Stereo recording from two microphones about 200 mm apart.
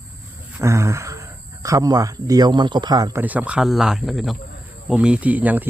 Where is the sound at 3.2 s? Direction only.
5° right (ahead or behind).